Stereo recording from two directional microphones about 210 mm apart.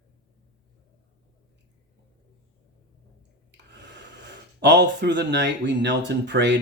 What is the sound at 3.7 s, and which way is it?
Speech, 55° right (ahead or behind).